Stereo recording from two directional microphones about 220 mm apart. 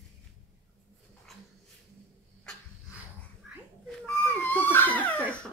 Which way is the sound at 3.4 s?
Centre (ahead or behind).